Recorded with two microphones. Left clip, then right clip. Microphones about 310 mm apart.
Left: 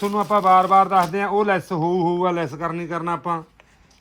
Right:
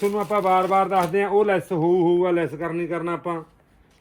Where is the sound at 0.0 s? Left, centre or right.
Centre.